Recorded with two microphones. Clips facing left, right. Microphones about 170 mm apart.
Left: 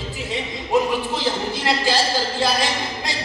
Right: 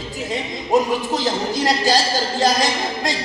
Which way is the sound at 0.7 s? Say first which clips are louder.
Right 2 dB; 45° right (ahead or behind).